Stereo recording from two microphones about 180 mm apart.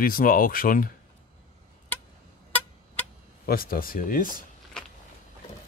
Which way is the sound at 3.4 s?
55° left (ahead or behind).